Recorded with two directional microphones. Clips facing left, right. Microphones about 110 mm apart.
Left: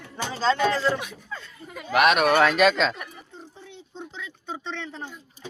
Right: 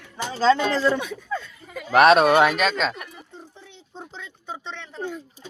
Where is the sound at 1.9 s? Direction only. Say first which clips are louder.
Right 5 dB; 35° right (ahead or behind).